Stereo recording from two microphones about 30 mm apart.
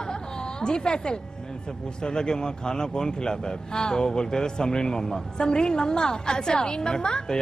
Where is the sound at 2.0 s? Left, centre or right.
Left.